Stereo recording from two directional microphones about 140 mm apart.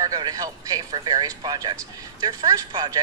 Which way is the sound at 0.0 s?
25° right (ahead or behind).